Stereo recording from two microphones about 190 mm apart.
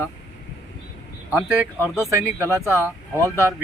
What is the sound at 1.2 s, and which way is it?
Speech, 10° right (ahead or behind).